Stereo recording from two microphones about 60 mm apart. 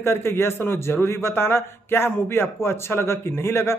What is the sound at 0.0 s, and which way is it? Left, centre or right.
A man's voice, left.